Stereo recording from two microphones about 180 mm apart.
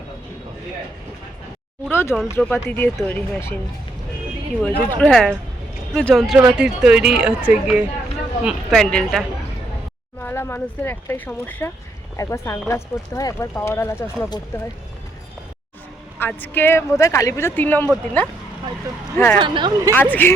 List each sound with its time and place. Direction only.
1.9 s speech: 10° left (ahead or behind)
4.9 s speech: 5° left (ahead or behind)
16.1 s speech: 10° left (ahead or behind)
19.4 s speech: 25° right (ahead or behind)
19.9 s speech: 10° left (ahead or behind)